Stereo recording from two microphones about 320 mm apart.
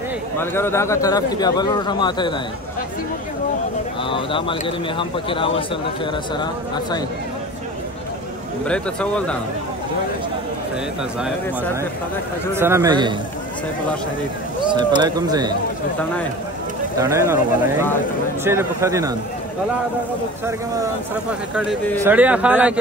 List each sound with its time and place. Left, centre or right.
0.4 s a man's voice: centre
4.1 s a man's voice: centre
8.6 s speech: centre
12.5 s speech: centre
15.0 s speech: centre
17.0 s speech: centre
20.4 s speech: centre
21.5 s speech: centre